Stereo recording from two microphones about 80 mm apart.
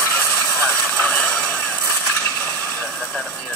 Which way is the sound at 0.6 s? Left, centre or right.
Centre.